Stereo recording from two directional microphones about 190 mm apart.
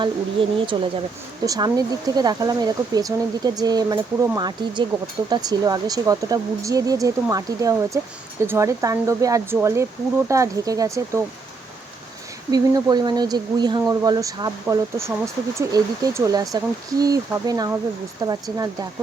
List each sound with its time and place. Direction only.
0.0 s speech: 25° right (ahead or behind)
12.5 s speech: 20° right (ahead or behind)